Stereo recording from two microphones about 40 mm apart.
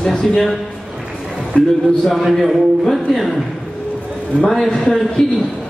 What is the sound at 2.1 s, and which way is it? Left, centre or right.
A man's voice, centre.